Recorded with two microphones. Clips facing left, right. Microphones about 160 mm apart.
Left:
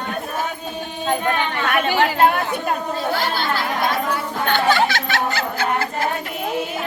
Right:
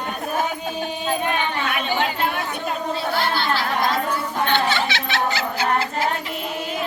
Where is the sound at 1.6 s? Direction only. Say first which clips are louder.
Left 4 dB; 60° left (ahead or behind).